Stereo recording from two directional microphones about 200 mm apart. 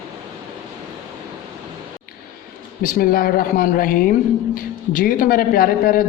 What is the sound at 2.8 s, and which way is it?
A man's voice, 45° left (ahead or behind).